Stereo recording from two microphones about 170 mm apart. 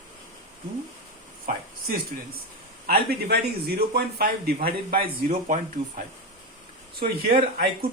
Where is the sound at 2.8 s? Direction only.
65° right (ahead or behind).